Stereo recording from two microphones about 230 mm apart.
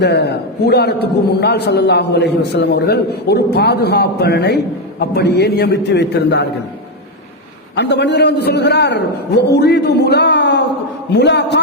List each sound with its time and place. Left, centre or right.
0.0 s a man's voice: left
7.8 s a man's voice: left